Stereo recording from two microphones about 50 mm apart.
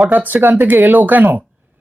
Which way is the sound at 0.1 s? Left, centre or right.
Right.